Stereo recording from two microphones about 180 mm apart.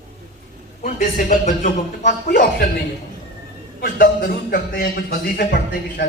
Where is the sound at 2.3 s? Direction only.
65° left (ahead or behind).